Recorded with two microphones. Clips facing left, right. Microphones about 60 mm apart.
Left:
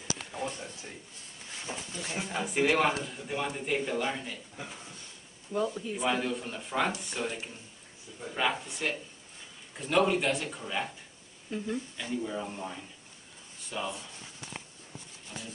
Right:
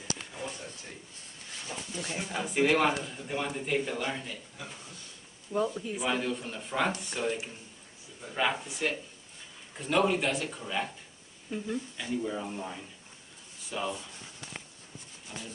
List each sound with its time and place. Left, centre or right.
0.2 s a sound: centre
1.7 s speech: left
2.0 s speech: centre
4.6 s speech: left
5.8 s speech: centre
15.3 s speech: centre